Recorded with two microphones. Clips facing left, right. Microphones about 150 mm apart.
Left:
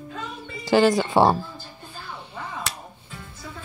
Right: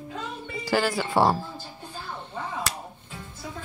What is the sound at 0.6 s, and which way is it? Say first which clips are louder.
Speech: left 7 dB; 20° left (ahead or behind).